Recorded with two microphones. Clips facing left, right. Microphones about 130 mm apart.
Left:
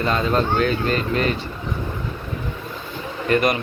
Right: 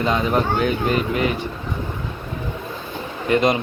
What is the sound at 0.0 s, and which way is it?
Speech, 15° right (ahead or behind).